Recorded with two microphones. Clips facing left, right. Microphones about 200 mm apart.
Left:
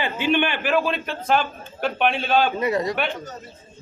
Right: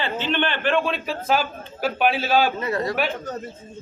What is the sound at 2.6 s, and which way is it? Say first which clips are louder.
Speech: left 2 dB; 15° left (ahead or behind).